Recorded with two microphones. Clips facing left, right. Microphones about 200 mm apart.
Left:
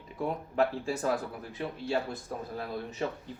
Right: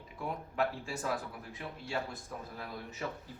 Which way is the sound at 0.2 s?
35° left (ahead or behind).